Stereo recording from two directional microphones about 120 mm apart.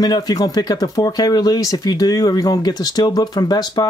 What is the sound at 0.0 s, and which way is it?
Speech, 30° left (ahead or behind).